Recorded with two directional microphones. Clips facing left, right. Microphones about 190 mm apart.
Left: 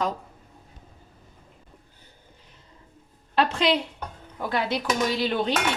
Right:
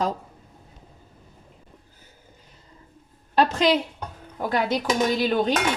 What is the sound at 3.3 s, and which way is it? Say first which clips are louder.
Dishes: right 3 dB; 45° right (ahead or behind).